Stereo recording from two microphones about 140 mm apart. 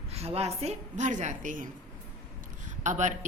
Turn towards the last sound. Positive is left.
turn(degrees=-60)  # may be behind; listen again after turning